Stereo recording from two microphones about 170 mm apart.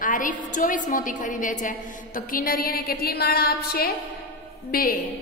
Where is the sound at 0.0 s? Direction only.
50° left (ahead or behind).